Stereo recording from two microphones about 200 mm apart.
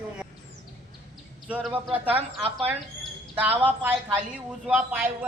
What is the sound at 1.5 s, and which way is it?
Speech, centre (ahead or behind).